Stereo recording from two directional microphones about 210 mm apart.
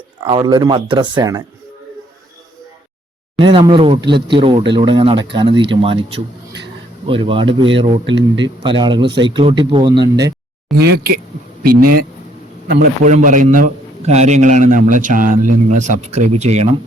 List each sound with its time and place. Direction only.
0.3 s speech: 20° right (ahead or behind)
3.3 s speech: 25° right (ahead or behind)
10.8 s a man's voice: 50° right (ahead or behind)
13.1 s a man's voice: 35° right (ahead or behind)